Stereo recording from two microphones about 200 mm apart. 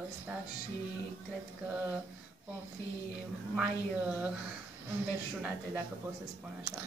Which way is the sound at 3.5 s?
5° right (ahead or behind).